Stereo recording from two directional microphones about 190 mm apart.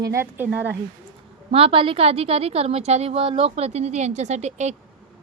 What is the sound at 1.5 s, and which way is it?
A woman's voice, 30° right (ahead or behind).